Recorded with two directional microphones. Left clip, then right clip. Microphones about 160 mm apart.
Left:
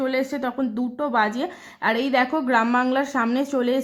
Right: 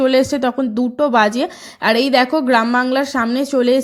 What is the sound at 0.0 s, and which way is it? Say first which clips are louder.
A woman's voice: right 10 dB; 40° right (ahead or behind).